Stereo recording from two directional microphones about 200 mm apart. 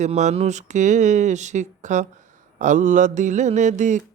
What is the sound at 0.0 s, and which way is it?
Speech, 35° right (ahead or behind).